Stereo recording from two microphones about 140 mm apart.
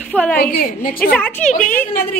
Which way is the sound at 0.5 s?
90° left.